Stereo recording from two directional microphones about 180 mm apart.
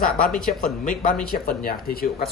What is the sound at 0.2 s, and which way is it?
Speech, centre (ahead or behind).